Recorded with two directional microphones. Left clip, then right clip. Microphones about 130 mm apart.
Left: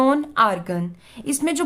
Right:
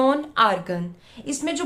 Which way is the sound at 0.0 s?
45° left (ahead or behind).